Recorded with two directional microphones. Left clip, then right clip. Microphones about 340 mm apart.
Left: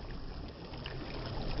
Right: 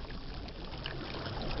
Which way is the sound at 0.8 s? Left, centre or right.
Right.